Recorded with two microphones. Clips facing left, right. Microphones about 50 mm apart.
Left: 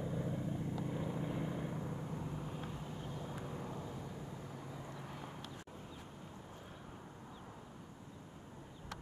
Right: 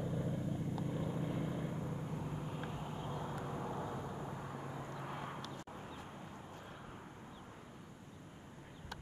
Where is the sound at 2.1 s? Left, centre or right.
Centre.